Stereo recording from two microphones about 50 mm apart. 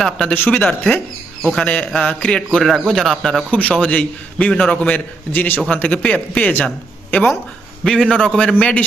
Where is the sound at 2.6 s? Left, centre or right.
Centre.